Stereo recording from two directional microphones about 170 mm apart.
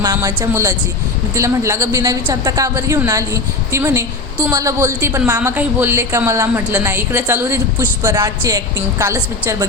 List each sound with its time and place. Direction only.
0.0 s a woman's voice: 20° right (ahead or behind)